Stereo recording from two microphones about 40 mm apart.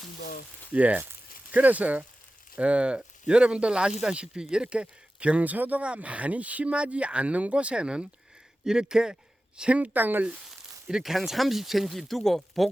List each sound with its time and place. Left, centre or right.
0.7 s speech: right; by 9.1 s centre
9.6 s speech: right
9.9 s speech: right
11.0 s speech: centre